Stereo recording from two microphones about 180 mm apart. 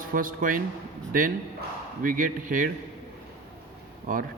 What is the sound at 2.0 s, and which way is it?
Speech, 50° right (ahead or behind).